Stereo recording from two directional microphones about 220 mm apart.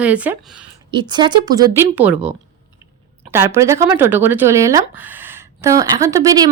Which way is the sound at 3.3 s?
10° right (ahead or behind).